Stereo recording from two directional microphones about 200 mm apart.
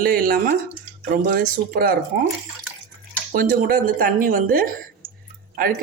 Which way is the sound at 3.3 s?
45° right (ahead or behind).